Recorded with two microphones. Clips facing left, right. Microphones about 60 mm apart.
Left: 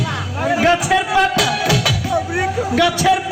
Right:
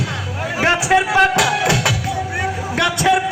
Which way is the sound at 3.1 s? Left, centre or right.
Right.